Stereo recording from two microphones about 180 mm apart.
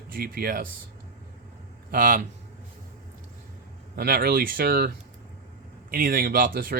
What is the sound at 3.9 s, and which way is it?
Speech, 60° right (ahead or behind).